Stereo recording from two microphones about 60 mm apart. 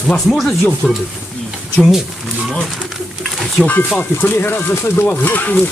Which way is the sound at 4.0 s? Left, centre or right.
Left.